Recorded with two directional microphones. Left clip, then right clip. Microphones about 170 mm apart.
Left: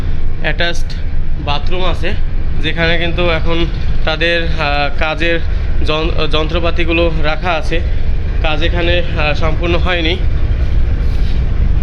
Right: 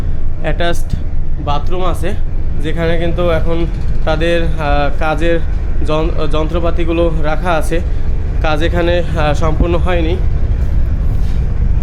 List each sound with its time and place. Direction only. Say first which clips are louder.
0.4 s speech: left 1 dB; 15° right (ahead or behind)
8.4 s a man's voice: right 1 dB; 35° right (ahead or behind)
9.8 s speech: left 2 dB; 5° right (ahead or behind)